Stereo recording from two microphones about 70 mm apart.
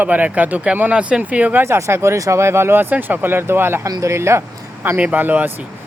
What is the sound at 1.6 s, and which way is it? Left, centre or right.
Speech, right.